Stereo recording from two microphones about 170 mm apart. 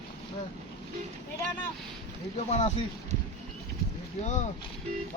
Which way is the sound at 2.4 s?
40° left (ahead or behind).